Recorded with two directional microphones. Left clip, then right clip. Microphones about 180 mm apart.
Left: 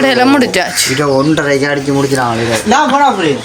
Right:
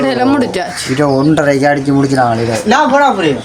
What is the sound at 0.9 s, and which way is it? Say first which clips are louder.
Speech: right 2 dB; 65° right (ahead or behind).